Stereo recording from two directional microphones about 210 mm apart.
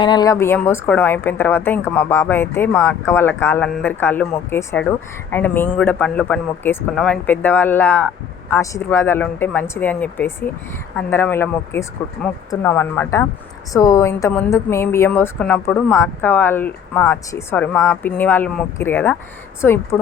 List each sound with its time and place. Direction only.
0.0 s a woman's voice: 20° left (ahead or behind)